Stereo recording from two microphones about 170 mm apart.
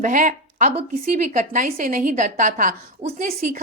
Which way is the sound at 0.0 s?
50° right (ahead or behind).